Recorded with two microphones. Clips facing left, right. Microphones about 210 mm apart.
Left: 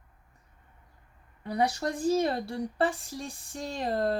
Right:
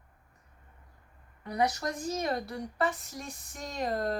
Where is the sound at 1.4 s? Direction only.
30° left (ahead or behind).